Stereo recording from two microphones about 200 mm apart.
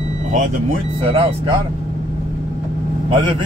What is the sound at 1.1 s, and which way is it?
Speech, 30° right (ahead or behind).